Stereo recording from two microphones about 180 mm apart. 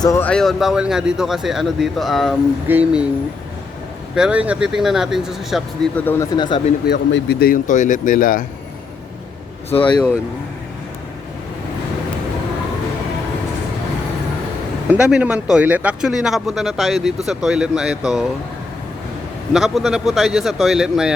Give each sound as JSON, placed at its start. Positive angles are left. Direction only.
{"t": 0.0, "sound": "speech", "side_deg": 15}
{"t": 0.3, "sound": "speech", "side_deg": 0}
{"t": 4.1, "sound": "speech", "side_deg": -5}
{"t": 6.3, "sound": "speech", "side_deg": 25}
{"t": 6.8, "sound": "speech", "side_deg": 65}
{"t": 9.6, "sound": "speech", "side_deg": 30}
{"t": 14.8, "sound": "speech", "side_deg": -5}
{"t": 19.5, "sound": "speech", "side_deg": 0}